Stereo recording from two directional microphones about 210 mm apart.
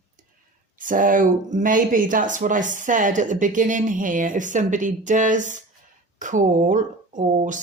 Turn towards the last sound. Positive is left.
turn(degrees=-35)  # may be behind; listen again after turning